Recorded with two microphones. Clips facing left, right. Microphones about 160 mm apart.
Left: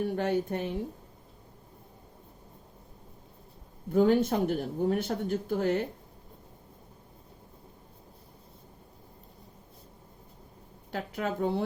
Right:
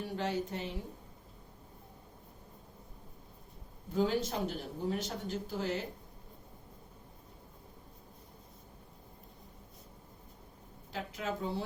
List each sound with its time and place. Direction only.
0.0 s speech: 55° left (ahead or behind)
3.9 s speech: 55° left (ahead or behind)
10.9 s speech: 60° left (ahead or behind)